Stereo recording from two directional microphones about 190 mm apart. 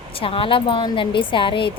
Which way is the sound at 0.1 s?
30° left (ahead or behind).